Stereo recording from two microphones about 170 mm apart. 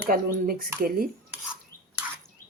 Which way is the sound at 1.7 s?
55° left (ahead or behind).